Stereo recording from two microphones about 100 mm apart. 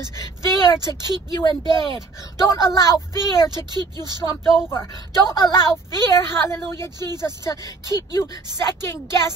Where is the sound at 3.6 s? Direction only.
45° right (ahead or behind).